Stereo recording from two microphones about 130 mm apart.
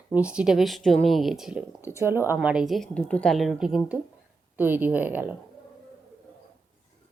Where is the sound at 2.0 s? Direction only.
20° right (ahead or behind).